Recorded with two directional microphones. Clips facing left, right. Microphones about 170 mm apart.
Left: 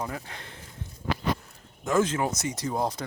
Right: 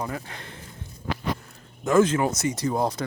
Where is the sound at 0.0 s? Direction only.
65° right (ahead or behind).